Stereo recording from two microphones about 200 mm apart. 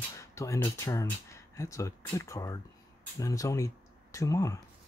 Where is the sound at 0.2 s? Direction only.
15° left (ahead or behind).